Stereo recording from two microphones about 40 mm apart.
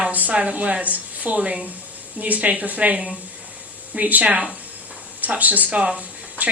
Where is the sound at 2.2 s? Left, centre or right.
Right.